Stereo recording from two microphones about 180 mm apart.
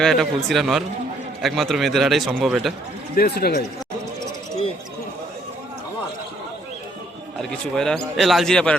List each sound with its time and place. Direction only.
0.0 s a man's voice: centre (ahead or behind)
3.2 s speech: 60° left (ahead or behind)
7.3 s a man's voice: 5° left (ahead or behind)